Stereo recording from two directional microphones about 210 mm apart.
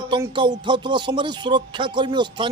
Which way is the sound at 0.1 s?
25° right (ahead or behind).